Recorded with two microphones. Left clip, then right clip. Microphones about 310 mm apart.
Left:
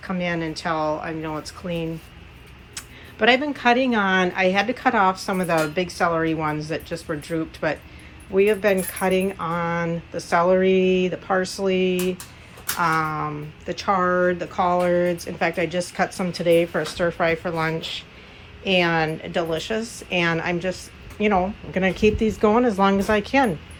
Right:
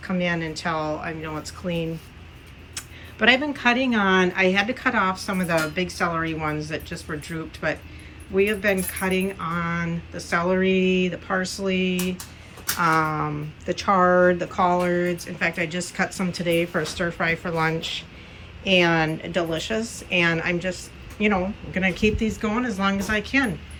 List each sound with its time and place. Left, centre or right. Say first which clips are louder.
0.0 s speech: even; centre
19.8 s speech: right 1 dB; centre
20.1 s speech: right 1 dB; centre